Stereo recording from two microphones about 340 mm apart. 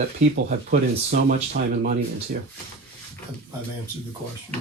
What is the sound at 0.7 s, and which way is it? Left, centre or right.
Speech, right.